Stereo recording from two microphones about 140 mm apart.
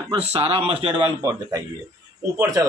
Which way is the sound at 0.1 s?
45° right (ahead or behind).